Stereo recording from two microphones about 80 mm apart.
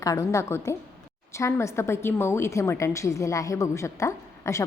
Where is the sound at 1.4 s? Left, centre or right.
Left.